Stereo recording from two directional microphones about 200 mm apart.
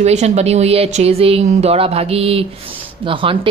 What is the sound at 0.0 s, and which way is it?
Speech, 35° right (ahead or behind).